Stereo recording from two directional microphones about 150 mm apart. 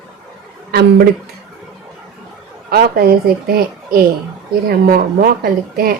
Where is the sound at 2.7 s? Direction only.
90° right.